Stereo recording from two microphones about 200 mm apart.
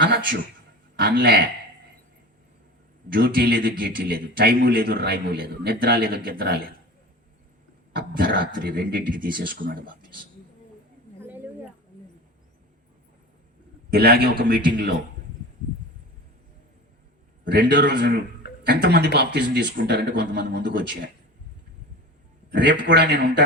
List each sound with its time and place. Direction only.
0.9 s a man's voice: 50° right (ahead or behind)
3.1 s a man's voice: 50° right (ahead or behind)
7.9 s a man's voice: 45° right (ahead or behind)
13.9 s a man's voice: 50° right (ahead or behind)
17.4 s speech: 60° right (ahead or behind)
22.5 s speech: 60° right (ahead or behind)